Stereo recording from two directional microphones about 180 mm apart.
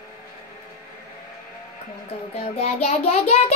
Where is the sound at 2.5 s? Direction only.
35° left (ahead or behind).